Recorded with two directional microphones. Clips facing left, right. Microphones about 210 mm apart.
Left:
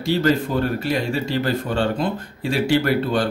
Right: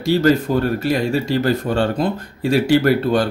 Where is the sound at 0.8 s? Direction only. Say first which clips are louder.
Right 4 dB; 40° right (ahead or behind).